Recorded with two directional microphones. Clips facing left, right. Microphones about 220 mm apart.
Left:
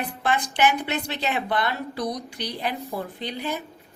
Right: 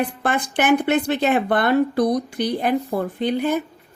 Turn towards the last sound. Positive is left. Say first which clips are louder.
# right 10 dB
turn(degrees=-55)  # may be behind; listen again after turning